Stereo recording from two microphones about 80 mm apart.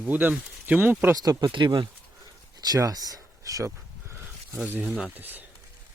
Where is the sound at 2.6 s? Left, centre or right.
Right.